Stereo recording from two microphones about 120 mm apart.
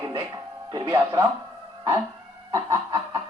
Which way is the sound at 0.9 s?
20° right (ahead or behind).